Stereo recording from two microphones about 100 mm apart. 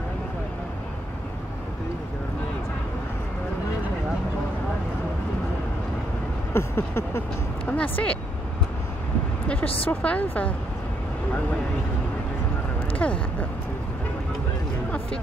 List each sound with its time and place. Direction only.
6.5 s speech: 20° left (ahead or behind)
9.8 s speech: 15° left (ahead or behind)
12.9 s speech: 15° left (ahead or behind)